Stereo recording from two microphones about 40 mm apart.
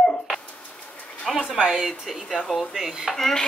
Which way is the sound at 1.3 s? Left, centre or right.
Centre.